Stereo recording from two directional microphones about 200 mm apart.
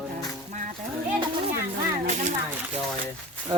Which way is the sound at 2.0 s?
40° right (ahead or behind).